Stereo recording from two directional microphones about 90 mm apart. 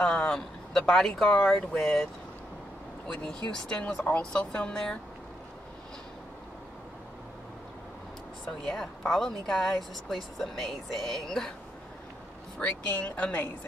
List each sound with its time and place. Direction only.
0.0 s speech: 10° left (ahead or behind)
3.1 s speech: 10° left (ahead or behind)
8.6 s speech: 5° left (ahead or behind)
12.5 s speech: 15° left (ahead or behind)